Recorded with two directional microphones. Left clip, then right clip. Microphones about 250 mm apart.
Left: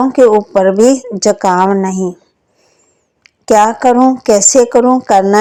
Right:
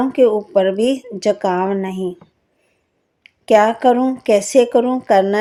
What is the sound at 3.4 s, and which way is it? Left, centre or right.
A woman's voice, left.